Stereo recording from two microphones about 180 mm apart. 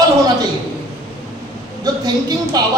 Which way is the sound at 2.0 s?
20° right (ahead or behind).